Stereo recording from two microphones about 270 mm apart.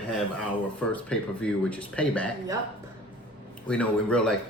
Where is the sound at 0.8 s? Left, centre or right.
Centre.